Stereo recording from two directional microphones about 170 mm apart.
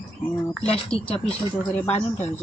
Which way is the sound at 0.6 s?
35° left (ahead or behind).